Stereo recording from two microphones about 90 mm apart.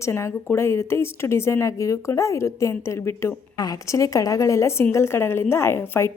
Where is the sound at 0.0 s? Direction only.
30° left (ahead or behind).